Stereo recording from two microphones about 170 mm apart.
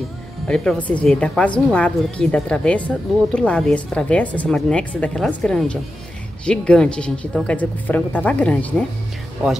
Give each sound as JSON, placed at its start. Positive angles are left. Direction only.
{"t": 0.5, "sound": "a woman's voice", "side_deg": 5}